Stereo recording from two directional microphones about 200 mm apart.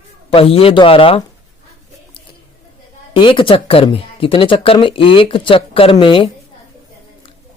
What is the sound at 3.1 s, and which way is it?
Speech, 25° left (ahead or behind).